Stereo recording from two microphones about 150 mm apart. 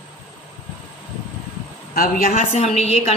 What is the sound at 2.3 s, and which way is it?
Speech, 50° left (ahead or behind).